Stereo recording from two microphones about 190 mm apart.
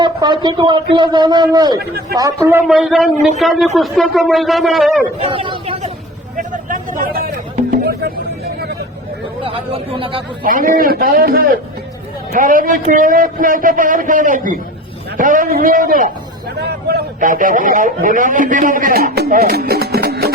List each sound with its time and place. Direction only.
0.0 s a man's voice: 25° right (ahead or behind)
2.5 s speech: 5° right (ahead or behind)
5.2 s a man's voice: 30° right (ahead or behind)
6.3 s speech: 45° right (ahead or behind)
9.4 s a man's voice: 30° right (ahead or behind)
10.4 s speech: 45° right (ahead or behind)
16.6 s speech: 55° right (ahead or behind)